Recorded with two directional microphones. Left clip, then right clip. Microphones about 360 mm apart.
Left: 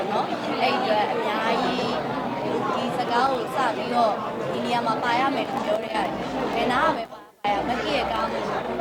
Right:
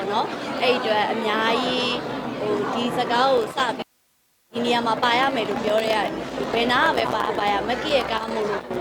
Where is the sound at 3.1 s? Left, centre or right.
Right.